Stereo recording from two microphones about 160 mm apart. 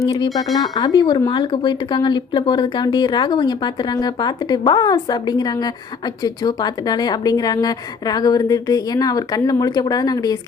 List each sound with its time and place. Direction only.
0.0 s speech: 25° left (ahead or behind)